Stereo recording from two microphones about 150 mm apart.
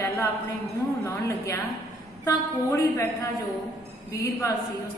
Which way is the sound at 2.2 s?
20° left (ahead or behind).